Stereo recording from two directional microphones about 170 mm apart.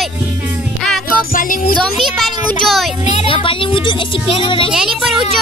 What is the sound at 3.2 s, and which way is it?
Speech, 30° left (ahead or behind).